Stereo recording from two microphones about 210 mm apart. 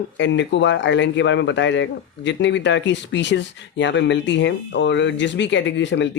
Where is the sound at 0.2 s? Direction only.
60° left (ahead or behind).